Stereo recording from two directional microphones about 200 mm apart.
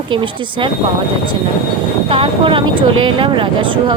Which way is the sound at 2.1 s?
25° right (ahead or behind).